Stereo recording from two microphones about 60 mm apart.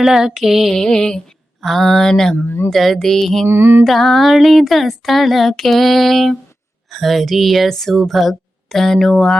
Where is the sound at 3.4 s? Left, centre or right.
Right.